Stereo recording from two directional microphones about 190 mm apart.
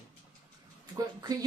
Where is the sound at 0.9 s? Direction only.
20° right (ahead or behind).